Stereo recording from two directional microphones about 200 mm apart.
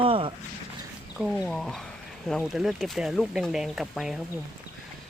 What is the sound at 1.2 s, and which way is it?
Speech, centre (ahead or behind).